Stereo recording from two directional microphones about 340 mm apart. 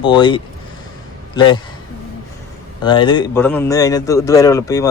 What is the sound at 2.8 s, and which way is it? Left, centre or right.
A man's voice, centre.